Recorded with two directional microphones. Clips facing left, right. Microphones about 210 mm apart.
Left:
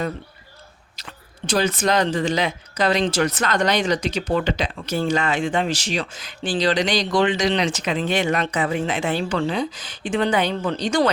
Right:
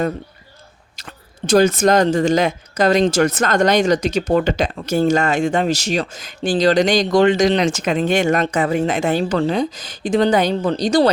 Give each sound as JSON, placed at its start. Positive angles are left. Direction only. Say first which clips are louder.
{"t": 1.5, "sound": "speech", "louder": "right 7 dB", "side_deg": -45}